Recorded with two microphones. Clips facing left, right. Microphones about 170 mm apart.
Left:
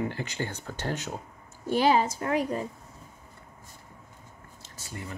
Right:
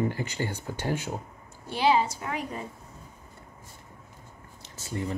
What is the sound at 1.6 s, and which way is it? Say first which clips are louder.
A woman's voice: left 1 dB; 45° left (ahead or behind).